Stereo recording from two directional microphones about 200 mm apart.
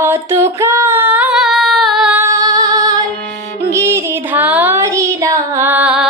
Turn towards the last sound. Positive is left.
turn(degrees=-5)  # may be behind; listen again after turning